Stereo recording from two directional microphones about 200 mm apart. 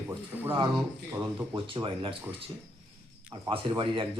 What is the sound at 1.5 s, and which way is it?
Speech, 25° right (ahead or behind).